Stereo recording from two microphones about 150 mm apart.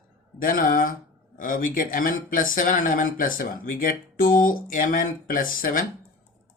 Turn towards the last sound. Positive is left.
turn(degrees=65)  # may be behind; listen again after turning